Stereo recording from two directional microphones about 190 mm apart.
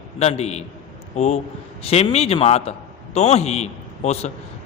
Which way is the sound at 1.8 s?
35° left (ahead or behind).